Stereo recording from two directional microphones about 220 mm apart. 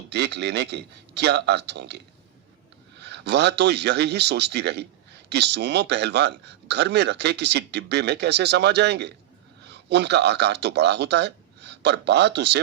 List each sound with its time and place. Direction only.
0.1 s a man's voice: 50° right (ahead or behind)
3.0 s a man's voice: 50° right (ahead or behind)